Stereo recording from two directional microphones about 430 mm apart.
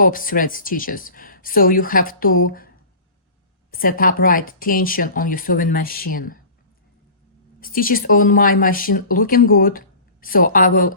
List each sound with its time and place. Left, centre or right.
0.0 s speech: centre
3.7 s speech: centre
7.6 s speech: centre